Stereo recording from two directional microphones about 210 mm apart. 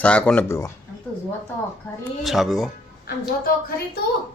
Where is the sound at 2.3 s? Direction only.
Centre (ahead or behind).